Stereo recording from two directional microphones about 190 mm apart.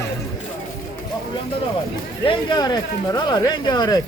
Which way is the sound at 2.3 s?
25° left (ahead or behind).